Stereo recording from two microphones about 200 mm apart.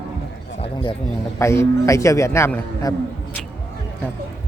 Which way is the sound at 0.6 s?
25° left (ahead or behind).